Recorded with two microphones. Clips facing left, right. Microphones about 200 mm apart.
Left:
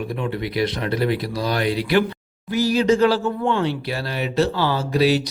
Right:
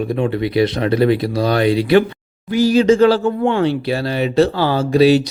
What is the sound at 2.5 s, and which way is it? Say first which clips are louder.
Speech: right 6 dB; 25° right (ahead or behind).